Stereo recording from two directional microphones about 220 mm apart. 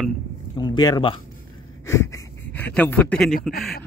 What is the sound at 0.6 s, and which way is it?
Speech, 20° left (ahead or behind).